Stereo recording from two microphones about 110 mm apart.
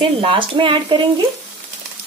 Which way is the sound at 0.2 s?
50° right (ahead or behind).